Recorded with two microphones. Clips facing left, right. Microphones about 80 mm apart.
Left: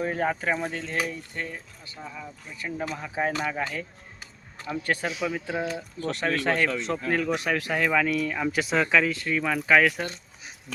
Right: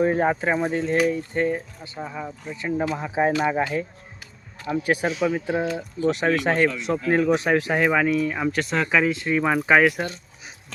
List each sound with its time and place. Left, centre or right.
0.0 s speech: right
1.3 s speech: right
4.6 s speech: centre
6.7 s speech: centre
7.1 s speech: right
8.5 s speech: centre
8.9 s speech: centre